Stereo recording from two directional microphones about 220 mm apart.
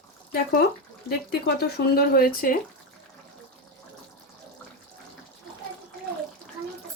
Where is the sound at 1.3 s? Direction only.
45° left (ahead or behind).